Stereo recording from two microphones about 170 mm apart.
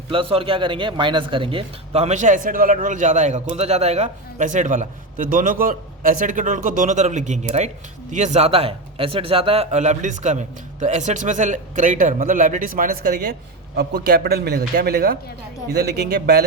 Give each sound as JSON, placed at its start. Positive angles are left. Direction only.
{"t": 0.1, "sound": "a man's voice", "side_deg": -30}